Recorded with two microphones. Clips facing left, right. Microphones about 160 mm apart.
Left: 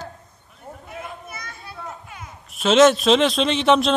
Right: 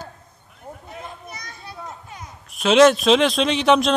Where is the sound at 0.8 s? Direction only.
40° right (ahead or behind).